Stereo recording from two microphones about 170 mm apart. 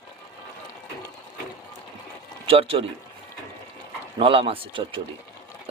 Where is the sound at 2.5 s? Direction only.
35° right (ahead or behind).